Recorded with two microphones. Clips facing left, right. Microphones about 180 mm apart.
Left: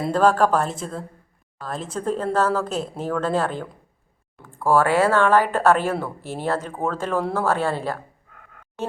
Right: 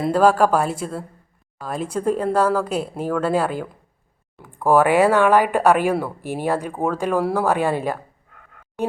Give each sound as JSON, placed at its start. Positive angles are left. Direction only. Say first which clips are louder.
{"t": 0.0, "sound": "speech", "louder": "right 2 dB", "side_deg": -10}